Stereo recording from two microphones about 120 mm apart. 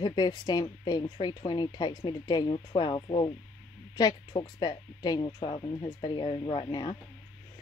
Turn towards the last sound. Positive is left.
turn(degrees=45)  # may be behind; listen again after turning